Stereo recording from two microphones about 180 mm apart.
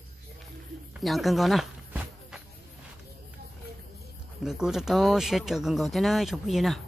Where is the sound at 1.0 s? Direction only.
Centre (ahead or behind).